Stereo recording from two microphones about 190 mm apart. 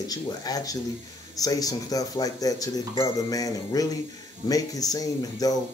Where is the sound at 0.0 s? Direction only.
20° left (ahead or behind).